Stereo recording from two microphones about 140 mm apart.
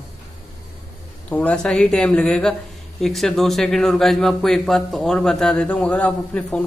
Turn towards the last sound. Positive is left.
turn(degrees=10)  # may be behind; listen again after turning